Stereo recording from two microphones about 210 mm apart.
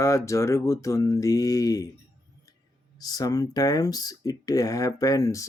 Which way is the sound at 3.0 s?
20° left (ahead or behind).